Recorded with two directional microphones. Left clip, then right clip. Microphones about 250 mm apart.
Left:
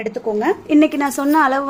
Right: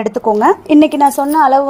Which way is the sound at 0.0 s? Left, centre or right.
Right.